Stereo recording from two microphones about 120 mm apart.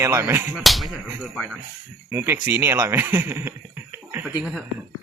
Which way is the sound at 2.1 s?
20° right (ahead or behind).